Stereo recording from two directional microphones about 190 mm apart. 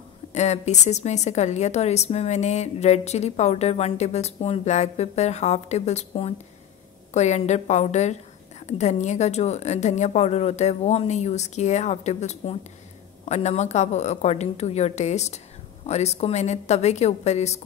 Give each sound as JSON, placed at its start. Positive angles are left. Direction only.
{"t": 0.3, "sound": "a woman's voice", "side_deg": 35}